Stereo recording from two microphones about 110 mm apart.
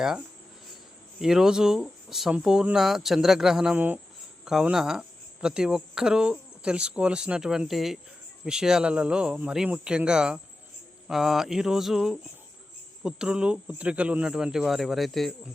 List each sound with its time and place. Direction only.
1.2 s speech: 5° right (ahead or behind)
3.8 s speech: 15° right (ahead or behind)
4.4 s speech: 5° right (ahead or behind)